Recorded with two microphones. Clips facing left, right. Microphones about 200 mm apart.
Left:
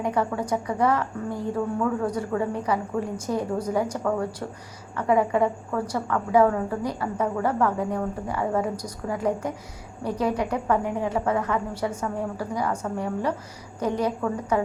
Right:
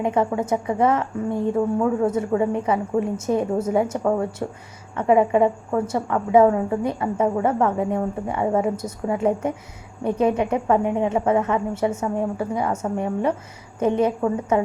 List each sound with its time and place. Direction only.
0.0 s a woman's voice: 25° right (ahead or behind)